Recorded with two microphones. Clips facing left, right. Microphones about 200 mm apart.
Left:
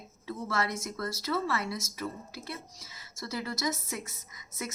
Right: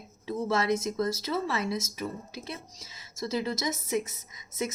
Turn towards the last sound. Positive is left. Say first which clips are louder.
# right 6 dB
turn(degrees=-20)  # may be behind; listen again after turning